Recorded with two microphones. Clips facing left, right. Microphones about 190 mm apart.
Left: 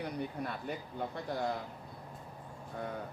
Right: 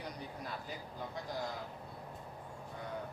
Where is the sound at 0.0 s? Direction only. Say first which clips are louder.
Left 7 dB; 60° left (ahead or behind).